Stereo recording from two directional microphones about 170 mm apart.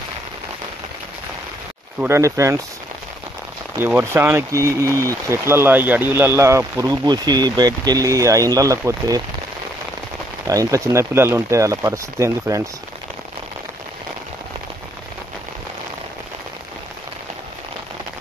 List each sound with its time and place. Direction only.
2.0 s speech: 15° right (ahead or behind)
3.7 s speech: 15° right (ahead or behind)
10.4 s speech: 20° right (ahead or behind)